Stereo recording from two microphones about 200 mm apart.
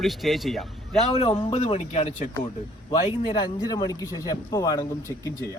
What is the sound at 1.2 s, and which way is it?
Speech, 30° left (ahead or behind).